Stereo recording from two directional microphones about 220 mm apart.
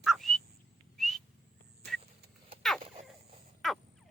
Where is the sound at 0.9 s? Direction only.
Centre (ahead or behind).